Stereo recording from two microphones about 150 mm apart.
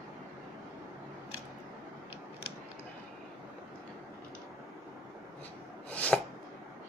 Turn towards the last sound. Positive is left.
turn(degrees=10)  # may be behind; listen again after turning